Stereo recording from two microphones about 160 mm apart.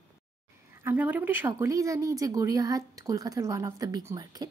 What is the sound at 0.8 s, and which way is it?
A woman's voice, 10° right (ahead or behind).